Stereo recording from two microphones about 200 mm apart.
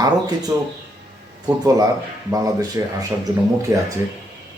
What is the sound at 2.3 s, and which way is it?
Speech, 15° right (ahead or behind).